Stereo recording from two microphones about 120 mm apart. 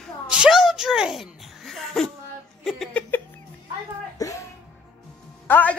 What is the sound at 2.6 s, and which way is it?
Speech, centre (ahead or behind).